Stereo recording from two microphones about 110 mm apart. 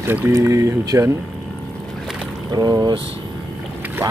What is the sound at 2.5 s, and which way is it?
Speech, 35° right (ahead or behind).